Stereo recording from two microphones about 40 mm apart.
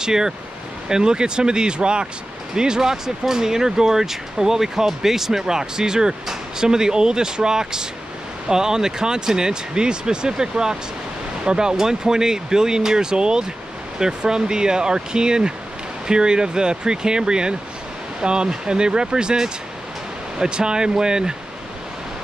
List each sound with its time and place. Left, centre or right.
0.0 s speech: centre